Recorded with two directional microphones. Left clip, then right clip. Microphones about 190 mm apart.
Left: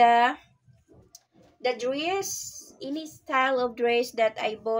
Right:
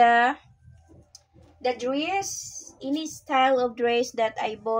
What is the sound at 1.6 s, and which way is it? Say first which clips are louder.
Speech: right 1 dB; 15° left (ahead or behind).